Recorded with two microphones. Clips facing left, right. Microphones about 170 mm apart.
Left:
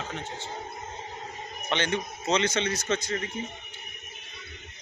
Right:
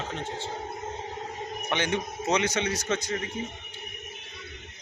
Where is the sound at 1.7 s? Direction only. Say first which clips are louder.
Even; 15° right (ahead or behind).